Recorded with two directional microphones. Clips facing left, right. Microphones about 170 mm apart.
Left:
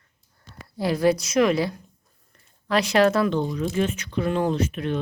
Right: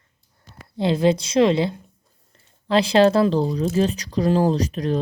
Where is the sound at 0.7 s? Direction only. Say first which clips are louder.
Right 2 dB; 25° right (ahead or behind).